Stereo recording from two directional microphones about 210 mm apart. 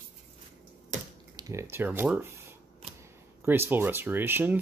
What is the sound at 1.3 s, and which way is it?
Speech, 15° right (ahead or behind).